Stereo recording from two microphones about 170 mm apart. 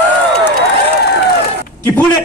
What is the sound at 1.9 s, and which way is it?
Speech, 20° left (ahead or behind).